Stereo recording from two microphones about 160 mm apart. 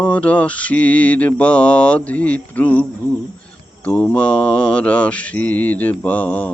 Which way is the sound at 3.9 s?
10° left (ahead or behind).